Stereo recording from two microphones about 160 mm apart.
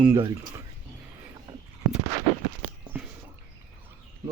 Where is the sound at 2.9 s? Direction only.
10° right (ahead or behind).